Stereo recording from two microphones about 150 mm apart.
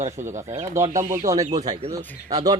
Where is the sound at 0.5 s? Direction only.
20° right (ahead or behind).